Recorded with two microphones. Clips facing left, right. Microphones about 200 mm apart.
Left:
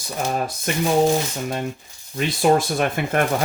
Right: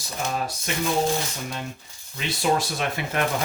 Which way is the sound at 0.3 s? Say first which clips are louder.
Left 4 dB; 50° left (ahead or behind).